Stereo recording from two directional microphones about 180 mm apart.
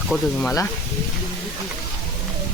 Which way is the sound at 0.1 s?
Centre (ahead or behind).